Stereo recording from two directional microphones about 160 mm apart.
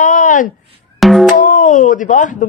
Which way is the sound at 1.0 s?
Centre (ahead or behind).